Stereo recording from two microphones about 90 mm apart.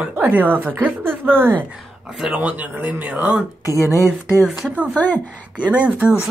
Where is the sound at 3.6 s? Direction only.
35° left (ahead or behind).